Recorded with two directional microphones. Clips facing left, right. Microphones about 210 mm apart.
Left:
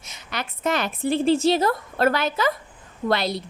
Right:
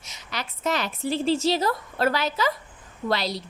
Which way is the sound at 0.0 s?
55° left (ahead or behind).